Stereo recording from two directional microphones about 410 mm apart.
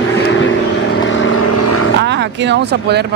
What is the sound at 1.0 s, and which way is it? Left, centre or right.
Vehicle, left.